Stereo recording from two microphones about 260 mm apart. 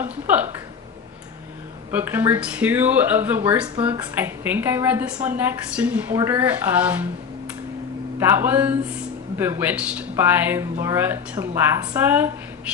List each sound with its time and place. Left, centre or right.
0.0 s a man's voice: centre
1.9 s a man's voice: centre
8.2 s a man's voice: centre